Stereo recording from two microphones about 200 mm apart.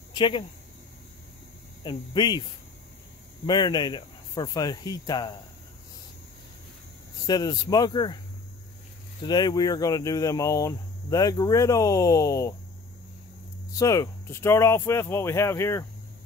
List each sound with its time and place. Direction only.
0.1 s speech: 25° left (ahead or behind)
1.9 s speech: 20° left (ahead or behind)
3.4 s speech: 20° left (ahead or behind)
7.2 s speech: 20° left (ahead or behind)
9.2 s speech: 20° left (ahead or behind)
13.7 s speech: 15° left (ahead or behind)